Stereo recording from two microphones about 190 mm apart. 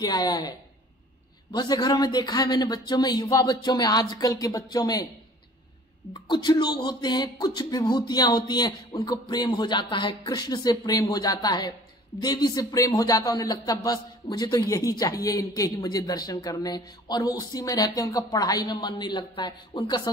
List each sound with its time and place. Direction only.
0.0 s speech: 20° left (ahead or behind)
6.2 s speech: 25° left (ahead or behind)